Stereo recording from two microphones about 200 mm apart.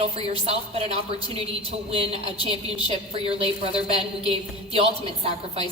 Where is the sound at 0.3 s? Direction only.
30° right (ahead or behind).